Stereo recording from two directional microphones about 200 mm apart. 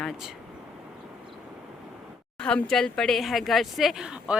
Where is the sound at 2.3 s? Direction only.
5° left (ahead or behind).